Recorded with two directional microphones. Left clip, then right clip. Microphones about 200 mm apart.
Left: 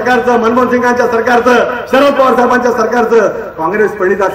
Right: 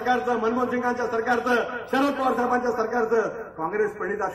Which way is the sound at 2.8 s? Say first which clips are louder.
Left 14 dB; 40° right (ahead or behind).